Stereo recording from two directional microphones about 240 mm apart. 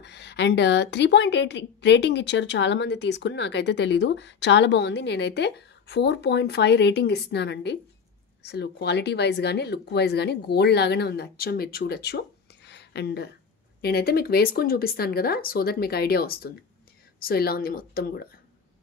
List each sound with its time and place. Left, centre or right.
0.0 s a woman's voice: left